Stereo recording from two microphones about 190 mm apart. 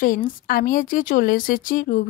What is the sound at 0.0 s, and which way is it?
Speech, 45° left (ahead or behind).